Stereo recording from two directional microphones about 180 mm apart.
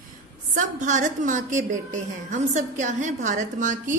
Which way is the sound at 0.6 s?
45° right (ahead or behind).